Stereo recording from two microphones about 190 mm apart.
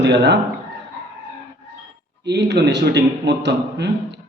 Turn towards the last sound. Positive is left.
turn(degrees=-65)  # may be behind; listen again after turning